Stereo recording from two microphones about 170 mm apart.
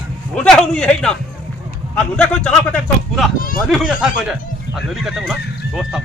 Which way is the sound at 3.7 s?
5° right (ahead or behind).